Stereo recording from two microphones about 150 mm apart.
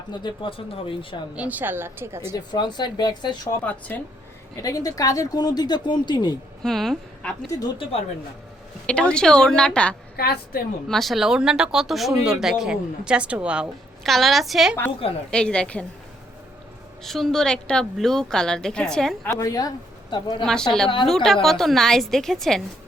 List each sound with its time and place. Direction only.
0.1 s speech: 30° left (ahead or behind)
1.4 s a woman's voice: 10° right (ahead or behind)
2.3 s speech: 30° left (ahead or behind)
3.6 s a woman's voice: 10° left (ahead or behind)
4.5 s speech: 25° left (ahead or behind)
6.6 s a woman's voice: centre (ahead or behind)
8.9 s speech: 5° left (ahead or behind)
10.2 s a woman's voice: 90° left
10.8 s a woman's voice: centre (ahead or behind)
17.0 s speech: centre (ahead or behind)
19.3 s speech: 20° left (ahead or behind)
20.4 s speech: 5° left (ahead or behind)